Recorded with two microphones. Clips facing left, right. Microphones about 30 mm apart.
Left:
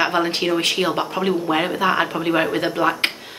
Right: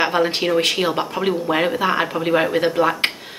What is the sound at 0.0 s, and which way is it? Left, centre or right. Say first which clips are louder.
Speech: right 1 dB; centre.